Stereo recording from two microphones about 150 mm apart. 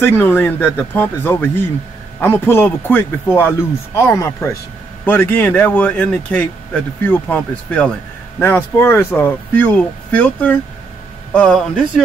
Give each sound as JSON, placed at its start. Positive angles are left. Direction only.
{"t": 0.0, "sound": "speech", "side_deg": 15}